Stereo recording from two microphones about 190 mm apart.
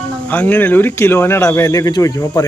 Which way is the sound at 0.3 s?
10° left (ahead or behind).